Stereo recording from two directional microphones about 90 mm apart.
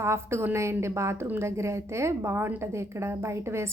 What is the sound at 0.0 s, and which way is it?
A woman's voice, 30° right (ahead or behind).